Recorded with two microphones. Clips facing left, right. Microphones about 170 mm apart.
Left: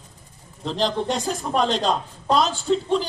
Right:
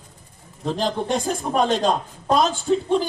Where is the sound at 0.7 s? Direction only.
50° right (ahead or behind).